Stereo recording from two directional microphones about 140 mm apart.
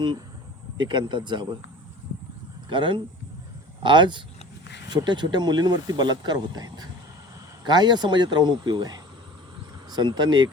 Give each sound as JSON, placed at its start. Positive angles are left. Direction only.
{"t": 0.8, "sound": "speech", "side_deg": -35}
{"t": 2.6, "sound": "speech", "side_deg": -35}